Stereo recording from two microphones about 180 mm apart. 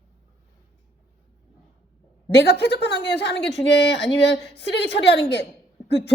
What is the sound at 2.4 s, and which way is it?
A woman's voice, 65° left (ahead or behind).